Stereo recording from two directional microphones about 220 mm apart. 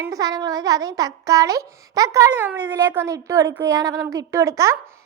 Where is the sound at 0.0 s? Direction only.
15° right (ahead or behind).